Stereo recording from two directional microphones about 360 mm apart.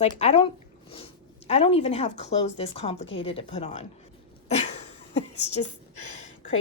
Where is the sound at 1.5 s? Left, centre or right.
Centre.